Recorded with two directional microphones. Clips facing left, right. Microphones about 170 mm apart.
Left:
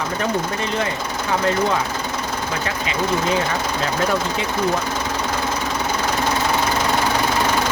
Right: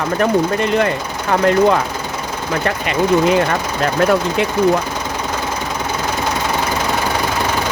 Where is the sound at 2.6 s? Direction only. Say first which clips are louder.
Right 8 dB; 60° right (ahead or behind).